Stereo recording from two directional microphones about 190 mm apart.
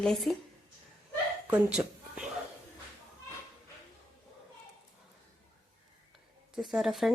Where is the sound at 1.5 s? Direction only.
5° right (ahead or behind).